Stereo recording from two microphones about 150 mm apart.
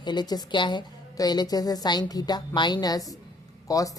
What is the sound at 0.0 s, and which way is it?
A woman's voice, 30° left (ahead or behind).